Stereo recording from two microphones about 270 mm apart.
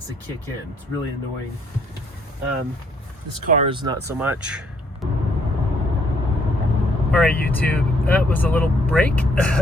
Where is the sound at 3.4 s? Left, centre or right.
Right; by 4.6 s centre.